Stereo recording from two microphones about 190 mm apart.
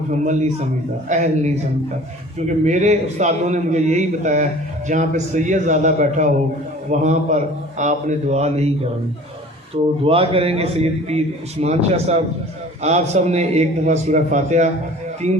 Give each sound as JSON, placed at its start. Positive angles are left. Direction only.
{"t": 0.1, "sound": "a man's voice", "side_deg": -40}
{"t": 2.6, "sound": "a man's voice", "side_deg": -40}
{"t": 10.0, "sound": "a man's voice", "side_deg": -30}